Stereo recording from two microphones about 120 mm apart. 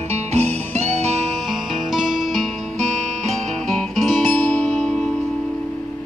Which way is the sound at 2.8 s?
80° right.